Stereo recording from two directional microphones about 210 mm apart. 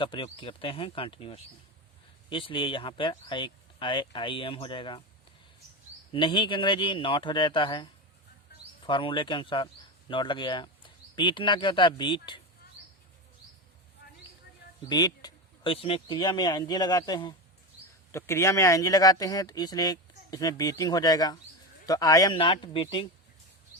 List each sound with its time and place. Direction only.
0.0 s speech: 25° left (ahead or behind)
6.1 s speech: 20° left (ahead or behind)
8.9 s speech: 25° left (ahead or behind)
14.8 s speech: 20° left (ahead or behind)